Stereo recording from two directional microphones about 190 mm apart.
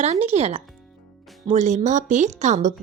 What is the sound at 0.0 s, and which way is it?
Speech, 35° right (ahead or behind).